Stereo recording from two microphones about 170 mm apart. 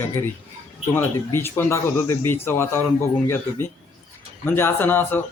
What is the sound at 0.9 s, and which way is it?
Speech, 15° left (ahead or behind).